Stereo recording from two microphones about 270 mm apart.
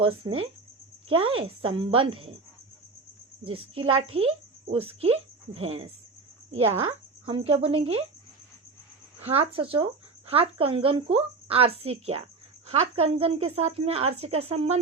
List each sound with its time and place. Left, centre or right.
0.0 s a woman's voice: centre
3.4 s a woman's voice: centre
7.3 s a woman's voice: centre
9.2 s a woman's voice: right